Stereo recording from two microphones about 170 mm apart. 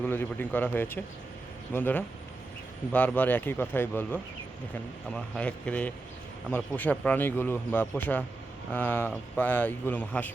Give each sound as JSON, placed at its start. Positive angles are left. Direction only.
{"t": 0.0, "sound": "a man's voice", "side_deg": 10}